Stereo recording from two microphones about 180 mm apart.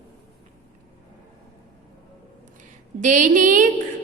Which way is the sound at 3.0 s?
45° right (ahead or behind).